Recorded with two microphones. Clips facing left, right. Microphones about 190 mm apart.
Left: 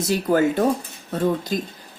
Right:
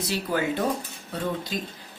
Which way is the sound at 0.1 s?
50° left (ahead or behind).